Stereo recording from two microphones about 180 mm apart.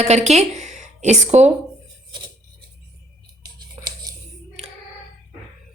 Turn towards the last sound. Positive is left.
turn(degrees=-20)  # may be behind; listen again after turning